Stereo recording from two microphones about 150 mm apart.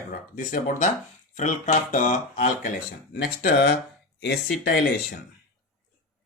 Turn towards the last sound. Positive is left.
turn(degrees=90)